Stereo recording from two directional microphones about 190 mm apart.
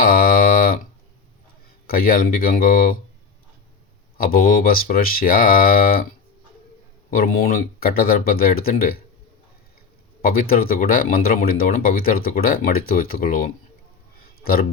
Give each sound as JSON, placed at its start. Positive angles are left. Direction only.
{"t": 0.0, "sound": "a sound", "side_deg": 50}
{"t": 1.9, "sound": "speech", "side_deg": 50}
{"t": 4.2, "sound": "speech", "side_deg": 50}
{"t": 7.1, "sound": "speech", "side_deg": 50}
{"t": 10.2, "sound": "speech", "side_deg": 50}